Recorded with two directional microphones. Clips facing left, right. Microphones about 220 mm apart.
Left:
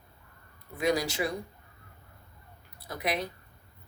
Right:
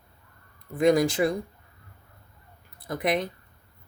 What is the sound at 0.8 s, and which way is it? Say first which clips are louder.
Speech: right 8 dB; 50° right (ahead or behind).